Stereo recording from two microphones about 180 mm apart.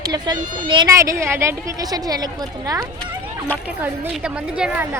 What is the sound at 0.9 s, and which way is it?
A woman's voice, 15° right (ahead or behind).